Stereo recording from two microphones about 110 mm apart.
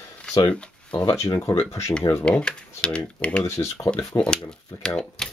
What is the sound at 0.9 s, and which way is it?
Speech, 30° left (ahead or behind).